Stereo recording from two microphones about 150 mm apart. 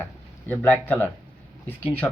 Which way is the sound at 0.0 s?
10° left (ahead or behind).